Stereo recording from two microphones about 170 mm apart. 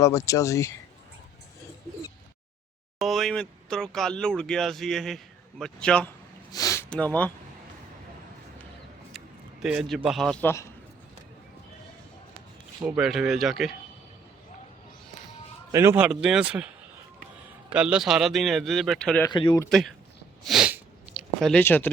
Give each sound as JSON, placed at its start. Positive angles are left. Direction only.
{"t": 0.0, "sound": "speech", "side_deg": 20}
{"t": 3.0, "sound": "speech", "side_deg": 0}
{"t": 6.5, "sound": "a sound", "side_deg": 20}
{"t": 6.9, "sound": "speech", "side_deg": 10}
{"t": 9.1, "sound": "speech", "side_deg": -5}
{"t": 10.4, "sound": "speech", "side_deg": 15}
{"t": 12.8, "sound": "speech", "side_deg": -5}
{"t": 15.7, "sound": "a man's voice", "side_deg": -15}
{"t": 19.3, "sound": "a man's voice", "side_deg": 30}
{"t": 20.4, "sound": "sniff", "side_deg": 0}
{"t": 21.6, "sound": "speech", "side_deg": 10}